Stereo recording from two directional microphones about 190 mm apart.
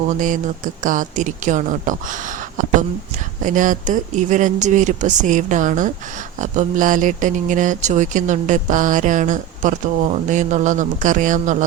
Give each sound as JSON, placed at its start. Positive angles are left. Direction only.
{"t": 0.1, "sound": "speech", "side_deg": -40}
{"t": 3.4, "sound": "speech", "side_deg": -45}